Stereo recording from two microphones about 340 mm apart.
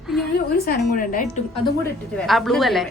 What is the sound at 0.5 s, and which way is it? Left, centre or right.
Speech, left.